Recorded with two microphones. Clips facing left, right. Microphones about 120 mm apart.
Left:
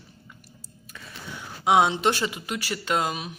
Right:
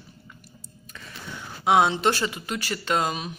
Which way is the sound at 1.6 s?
15° left (ahead or behind).